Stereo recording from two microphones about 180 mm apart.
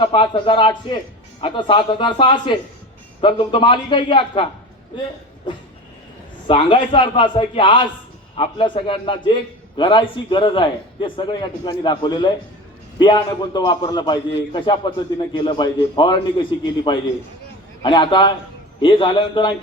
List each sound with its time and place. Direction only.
0.0 s a man's voice: 30° left (ahead or behind)
5.5 s a man's voice: 25° left (ahead or behind)